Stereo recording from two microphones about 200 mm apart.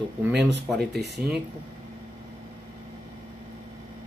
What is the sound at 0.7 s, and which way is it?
Speech, centre (ahead or behind).